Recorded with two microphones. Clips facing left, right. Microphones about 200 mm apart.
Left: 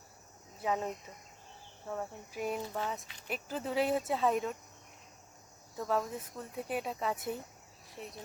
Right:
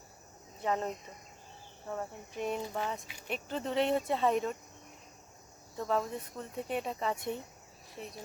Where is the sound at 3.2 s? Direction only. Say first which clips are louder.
Right 1 dB; 5° left (ahead or behind).